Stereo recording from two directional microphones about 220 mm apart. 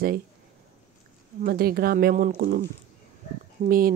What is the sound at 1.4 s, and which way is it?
Speech, 40° right (ahead or behind).